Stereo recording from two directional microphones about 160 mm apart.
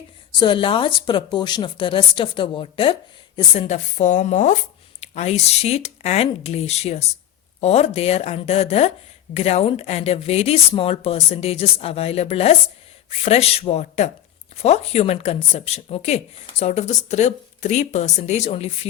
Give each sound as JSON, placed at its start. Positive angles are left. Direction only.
{"t": 0.3, "sound": "speech", "side_deg": 30}
{"t": 3.6, "sound": "speech", "side_deg": 45}